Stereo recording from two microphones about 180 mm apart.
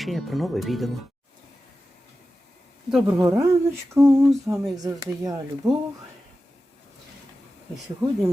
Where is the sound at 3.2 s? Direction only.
15° right (ahead or behind).